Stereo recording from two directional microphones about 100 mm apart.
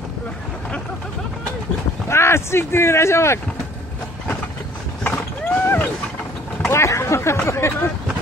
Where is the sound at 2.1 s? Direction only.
25° left (ahead or behind).